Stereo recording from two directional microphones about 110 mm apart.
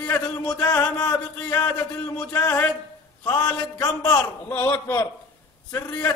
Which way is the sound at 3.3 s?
30° left (ahead or behind).